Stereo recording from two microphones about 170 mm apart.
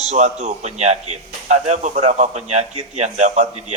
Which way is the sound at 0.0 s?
40° right (ahead or behind).